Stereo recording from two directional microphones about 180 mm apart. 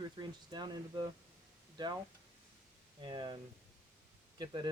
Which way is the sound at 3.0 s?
25° right (ahead or behind).